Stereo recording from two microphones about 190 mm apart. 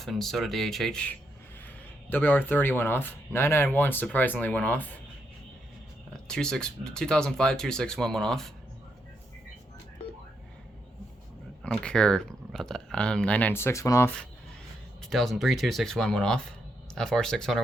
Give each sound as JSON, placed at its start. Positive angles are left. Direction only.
{"t": 0.0, "sound": "speech", "side_deg": 0}
{"t": 6.2, "sound": "speech", "side_deg": 5}
{"t": 11.6, "sound": "speech", "side_deg": 5}